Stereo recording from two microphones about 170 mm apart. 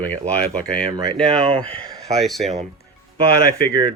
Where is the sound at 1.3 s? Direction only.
35° right (ahead or behind).